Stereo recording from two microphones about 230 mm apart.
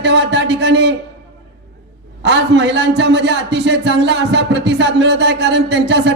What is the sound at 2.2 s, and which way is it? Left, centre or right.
A man's voice, right.